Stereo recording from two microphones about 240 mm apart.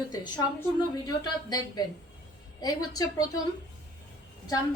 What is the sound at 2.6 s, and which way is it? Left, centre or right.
Speech, centre.